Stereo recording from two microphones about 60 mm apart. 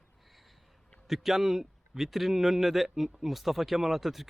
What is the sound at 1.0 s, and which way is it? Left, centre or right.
A man's voice, centre.